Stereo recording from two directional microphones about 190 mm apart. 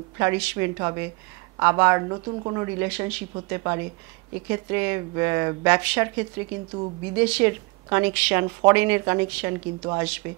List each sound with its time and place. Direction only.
0.2 s speech: 10° right (ahead or behind)